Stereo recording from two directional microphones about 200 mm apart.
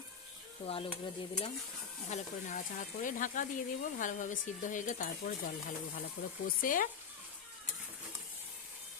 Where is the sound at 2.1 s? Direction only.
40° left (ahead or behind).